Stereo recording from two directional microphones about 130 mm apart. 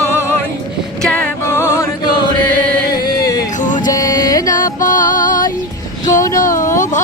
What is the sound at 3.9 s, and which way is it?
Music, 30° left (ahead or behind).